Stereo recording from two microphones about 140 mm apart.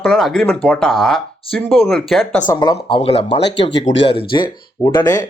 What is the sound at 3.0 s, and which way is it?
Speech, 45° left (ahead or behind).